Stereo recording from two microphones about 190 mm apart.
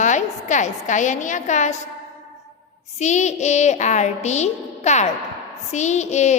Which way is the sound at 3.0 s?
40° left (ahead or behind).